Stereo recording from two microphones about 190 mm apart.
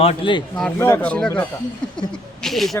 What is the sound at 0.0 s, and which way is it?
Speech, 30° left (ahead or behind).